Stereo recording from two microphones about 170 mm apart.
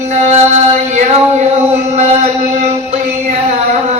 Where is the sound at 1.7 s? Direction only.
40° right (ahead or behind).